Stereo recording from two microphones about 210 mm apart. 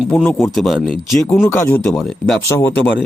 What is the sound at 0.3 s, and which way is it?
Speech, 10° left (ahead or behind).